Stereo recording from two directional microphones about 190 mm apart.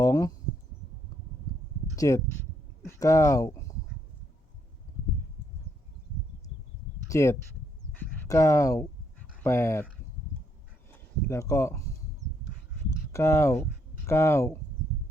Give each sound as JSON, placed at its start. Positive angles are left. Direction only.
{"t": 0.0, "sound": "speech", "side_deg": 20}
{"t": 2.0, "sound": "speech", "side_deg": 15}
{"t": 7.1, "sound": "speech", "side_deg": 15}
{"t": 11.3, "sound": "speech", "side_deg": 15}
{"t": 13.1, "sound": "speech", "side_deg": 15}